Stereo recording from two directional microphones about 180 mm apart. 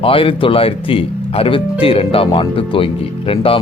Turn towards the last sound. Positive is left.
turn(degrees=30)  # may be behind; listen again after turning